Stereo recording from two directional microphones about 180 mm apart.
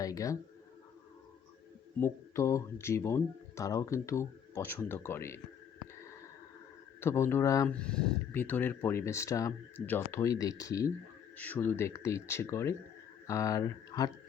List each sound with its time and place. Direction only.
0.0 s speech: 20° left (ahead or behind)
2.0 s speech: 15° left (ahead or behind)
7.0 s speech: 15° left (ahead or behind)
7.7 s speech: 5° left (ahead or behind)